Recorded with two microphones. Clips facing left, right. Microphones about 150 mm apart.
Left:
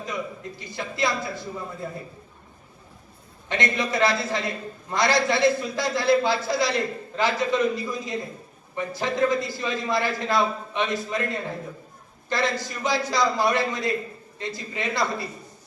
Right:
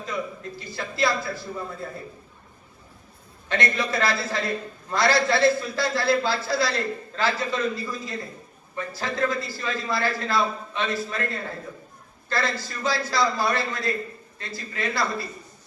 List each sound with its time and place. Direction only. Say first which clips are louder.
0.6 s a man's voice: right 1 dB; 20° left (ahead or behind)
3.5 s a man's voice: even; 20° left (ahead or behind)